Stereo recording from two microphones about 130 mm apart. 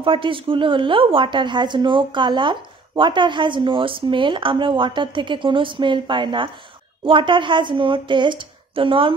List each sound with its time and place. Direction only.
0.0 s speech: 40° right (ahead or behind)